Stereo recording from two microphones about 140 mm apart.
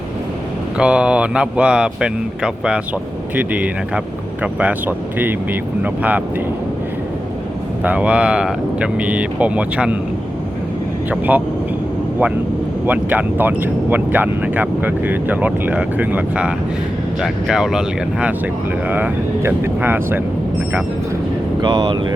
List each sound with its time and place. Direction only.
0.8 s speech: 5° right (ahead or behind)
7.9 s speech: 10° right (ahead or behind)
11.1 s speech: 10° right (ahead or behind)
12.8 s speech: 10° right (ahead or behind)
21.6 s speech: 30° right (ahead or behind)